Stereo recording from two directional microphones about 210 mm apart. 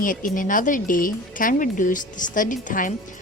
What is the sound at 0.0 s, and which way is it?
A woman's voice, 40° left (ahead or behind).